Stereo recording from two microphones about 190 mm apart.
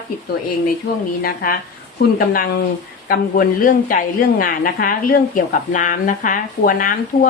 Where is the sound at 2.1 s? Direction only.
50° left (ahead or behind).